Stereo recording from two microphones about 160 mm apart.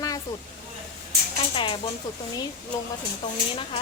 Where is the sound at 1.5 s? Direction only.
35° left (ahead or behind).